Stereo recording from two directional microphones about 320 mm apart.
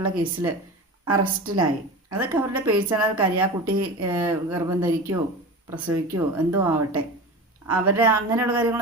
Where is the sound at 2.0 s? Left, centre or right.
Centre.